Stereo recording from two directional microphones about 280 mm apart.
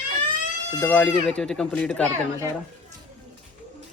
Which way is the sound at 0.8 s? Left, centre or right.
Centre.